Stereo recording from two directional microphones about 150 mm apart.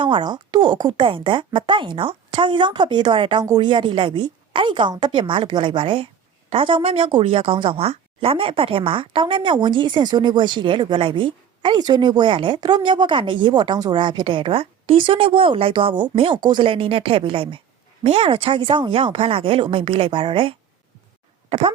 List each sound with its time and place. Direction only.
0.0 s a woman's voice: 30° right (ahead or behind)